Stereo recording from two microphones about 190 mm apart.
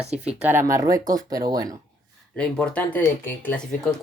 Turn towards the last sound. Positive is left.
turn(degrees=10)  # may be behind; listen again after turning